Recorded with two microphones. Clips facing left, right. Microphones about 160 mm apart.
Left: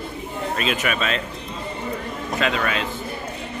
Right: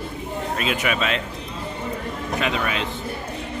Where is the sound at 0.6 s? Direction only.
15° right (ahead or behind).